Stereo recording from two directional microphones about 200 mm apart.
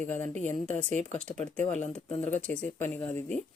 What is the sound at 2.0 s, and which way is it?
Speech, 35° left (ahead or behind).